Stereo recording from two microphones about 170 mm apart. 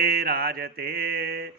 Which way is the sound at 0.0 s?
65° right (ahead or behind).